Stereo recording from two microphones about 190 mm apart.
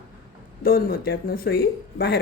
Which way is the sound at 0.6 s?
50° left (ahead or behind).